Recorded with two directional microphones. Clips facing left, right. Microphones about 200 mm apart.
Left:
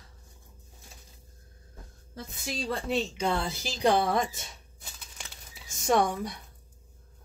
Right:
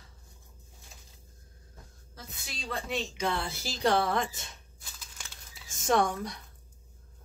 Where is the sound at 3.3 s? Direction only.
25° left (ahead or behind).